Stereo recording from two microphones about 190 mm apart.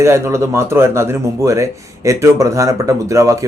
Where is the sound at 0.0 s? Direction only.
15° right (ahead or behind).